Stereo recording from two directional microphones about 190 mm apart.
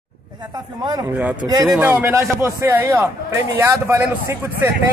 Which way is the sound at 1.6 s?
10° right (ahead or behind).